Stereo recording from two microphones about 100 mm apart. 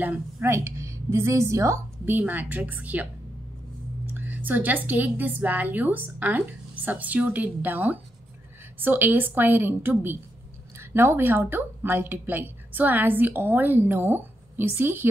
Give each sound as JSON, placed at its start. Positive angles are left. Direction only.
{"t": 0.0, "sound": "a woman's voice", "side_deg": -20}
{"t": 2.0, "sound": "speech", "side_deg": -15}
{"t": 4.1, "sound": "a woman's voice", "side_deg": -20}